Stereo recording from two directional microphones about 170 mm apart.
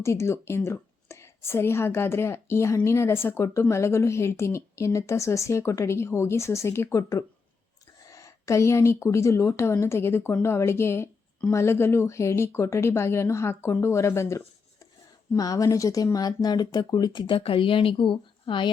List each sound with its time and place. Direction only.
0.0 s a woman's voice: 15° left (ahead or behind)